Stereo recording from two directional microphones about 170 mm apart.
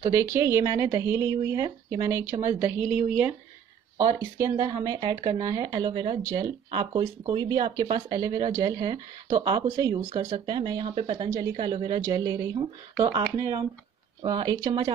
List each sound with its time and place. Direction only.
0.0 s a woman's voice: 15° right (ahead or behind)